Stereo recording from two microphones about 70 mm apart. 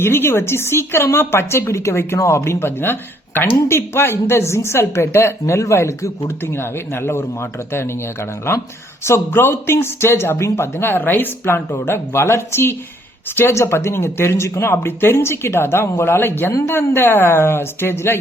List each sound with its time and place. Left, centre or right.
0.0 s speech: left